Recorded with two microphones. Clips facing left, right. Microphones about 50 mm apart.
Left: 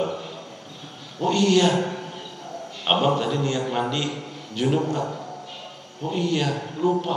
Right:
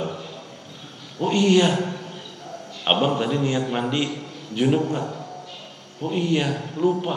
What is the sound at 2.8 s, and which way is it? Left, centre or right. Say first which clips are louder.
A man's voice: even; centre.